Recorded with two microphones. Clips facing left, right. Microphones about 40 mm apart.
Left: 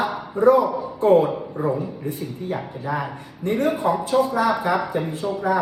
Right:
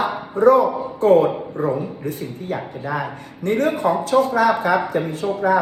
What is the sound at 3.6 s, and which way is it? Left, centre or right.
A woman's voice, right.